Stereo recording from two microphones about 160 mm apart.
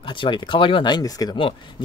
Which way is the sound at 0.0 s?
30° left (ahead or behind).